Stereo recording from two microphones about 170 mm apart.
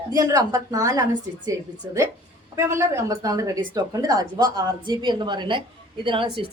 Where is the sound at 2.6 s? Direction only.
15° right (ahead or behind).